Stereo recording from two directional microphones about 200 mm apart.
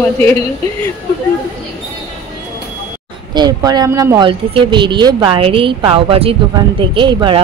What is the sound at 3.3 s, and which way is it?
Speech, 20° right (ahead or behind).